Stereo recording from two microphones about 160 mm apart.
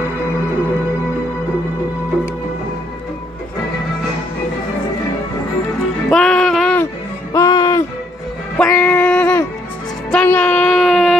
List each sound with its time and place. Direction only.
6.0 s music: 5° left (ahead or behind)
7.3 s music: 25° left (ahead or behind)
8.6 s a sound: 10° left (ahead or behind)